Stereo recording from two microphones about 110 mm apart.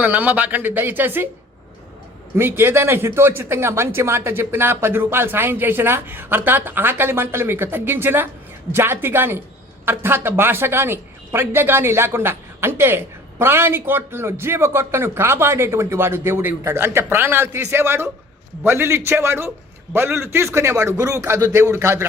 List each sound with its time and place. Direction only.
0.0 s speech: 15° right (ahead or behind)
2.3 s speech: 20° right (ahead or behind)